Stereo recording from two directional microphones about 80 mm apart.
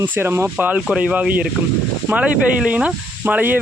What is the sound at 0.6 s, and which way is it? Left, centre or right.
Speech, centre.